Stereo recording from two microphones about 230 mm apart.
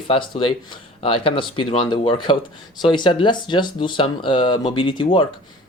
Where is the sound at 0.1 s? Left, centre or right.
Left.